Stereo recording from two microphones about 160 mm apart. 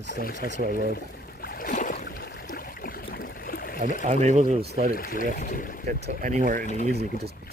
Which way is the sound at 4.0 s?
45° right (ahead or behind).